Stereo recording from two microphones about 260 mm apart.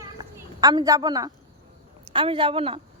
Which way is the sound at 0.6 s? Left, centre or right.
Centre.